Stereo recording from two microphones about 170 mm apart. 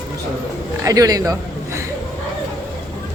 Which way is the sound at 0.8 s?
20° right (ahead or behind).